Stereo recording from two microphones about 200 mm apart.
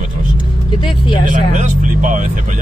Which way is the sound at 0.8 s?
25° left (ahead or behind).